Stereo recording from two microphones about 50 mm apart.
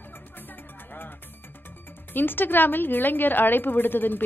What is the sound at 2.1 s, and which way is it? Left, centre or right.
A woman's voice, left.